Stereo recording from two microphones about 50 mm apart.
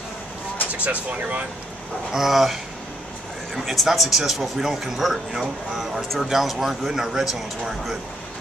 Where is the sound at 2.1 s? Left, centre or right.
Centre.